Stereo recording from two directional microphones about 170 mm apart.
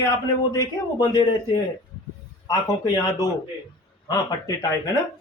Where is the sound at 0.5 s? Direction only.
20° left (ahead or behind).